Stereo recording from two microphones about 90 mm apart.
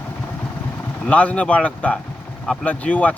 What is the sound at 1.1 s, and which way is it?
Speech, 15° left (ahead or behind).